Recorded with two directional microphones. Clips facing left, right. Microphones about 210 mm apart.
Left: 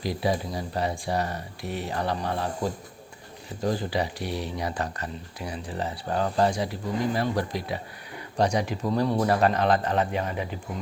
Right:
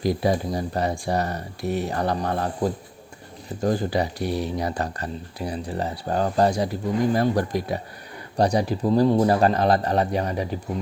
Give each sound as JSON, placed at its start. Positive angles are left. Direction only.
{"t": 0.0, "sound": "speech", "side_deg": -45}
{"t": 3.6, "sound": "speech", "side_deg": -45}